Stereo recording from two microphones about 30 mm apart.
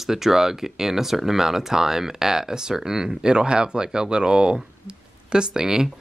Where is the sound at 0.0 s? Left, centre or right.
Centre.